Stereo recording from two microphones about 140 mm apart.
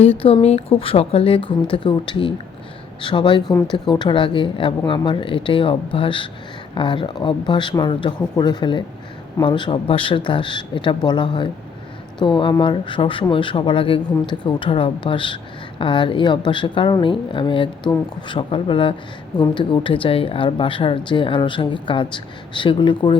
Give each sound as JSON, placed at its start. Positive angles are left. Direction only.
{"t": 0.0, "sound": "a woman's voice", "side_deg": 45}